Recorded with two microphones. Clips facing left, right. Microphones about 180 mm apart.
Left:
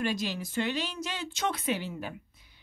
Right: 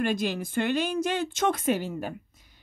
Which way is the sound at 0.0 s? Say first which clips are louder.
Right 4 dB; 50° right (ahead or behind).